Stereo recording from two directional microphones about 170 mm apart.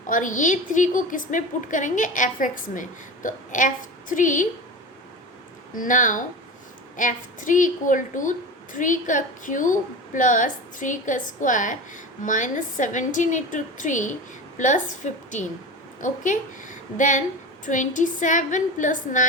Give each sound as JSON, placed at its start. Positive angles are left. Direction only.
{"t": 0.1, "sound": "a woman's voice", "side_deg": 50}
{"t": 5.7, "sound": "a woman's voice", "side_deg": 50}